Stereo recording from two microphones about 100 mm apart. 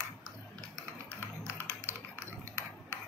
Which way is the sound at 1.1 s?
30° right (ahead or behind).